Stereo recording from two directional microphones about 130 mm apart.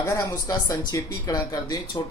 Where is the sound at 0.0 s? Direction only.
25° left (ahead or behind).